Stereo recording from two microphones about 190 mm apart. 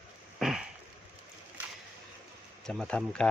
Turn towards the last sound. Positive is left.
turn(degrees=5)  # may be behind; listen again after turning